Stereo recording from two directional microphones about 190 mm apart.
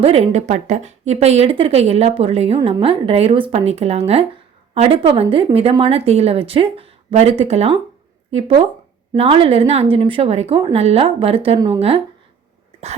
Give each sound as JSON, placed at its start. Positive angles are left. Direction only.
{"t": 0.0, "sound": "speech", "side_deg": -30}